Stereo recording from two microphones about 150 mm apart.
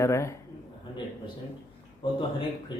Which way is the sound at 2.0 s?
35° left (ahead or behind).